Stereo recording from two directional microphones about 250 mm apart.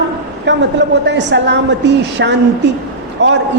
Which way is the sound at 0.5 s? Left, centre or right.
Right.